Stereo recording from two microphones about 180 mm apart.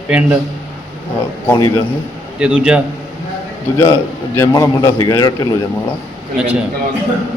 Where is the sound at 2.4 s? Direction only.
5° right (ahead or behind).